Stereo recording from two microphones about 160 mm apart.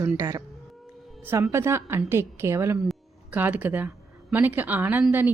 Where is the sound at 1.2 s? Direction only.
15° right (ahead or behind).